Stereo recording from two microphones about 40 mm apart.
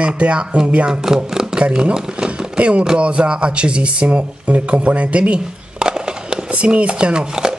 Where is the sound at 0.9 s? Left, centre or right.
Centre.